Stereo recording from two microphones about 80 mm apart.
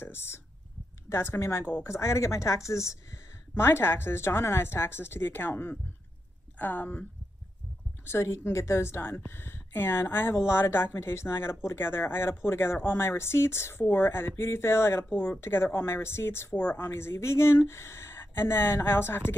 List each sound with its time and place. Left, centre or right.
0.0 s speech: left
8.0 s speech: left